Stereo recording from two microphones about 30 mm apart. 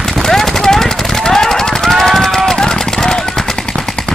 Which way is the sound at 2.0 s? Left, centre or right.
Centre.